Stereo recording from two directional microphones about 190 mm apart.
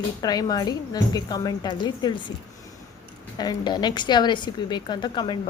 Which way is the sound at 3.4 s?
20° left (ahead or behind).